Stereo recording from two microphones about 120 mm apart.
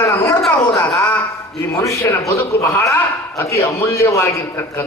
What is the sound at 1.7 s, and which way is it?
A man's voice, 25° left (ahead or behind).